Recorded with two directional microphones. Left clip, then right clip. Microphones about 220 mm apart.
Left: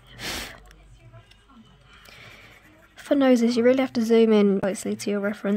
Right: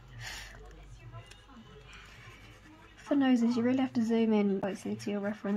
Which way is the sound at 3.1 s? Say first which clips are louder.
Left 9 dB; 45° left (ahead or behind).